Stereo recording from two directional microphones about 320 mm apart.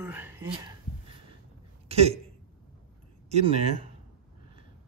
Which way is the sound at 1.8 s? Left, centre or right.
Centre.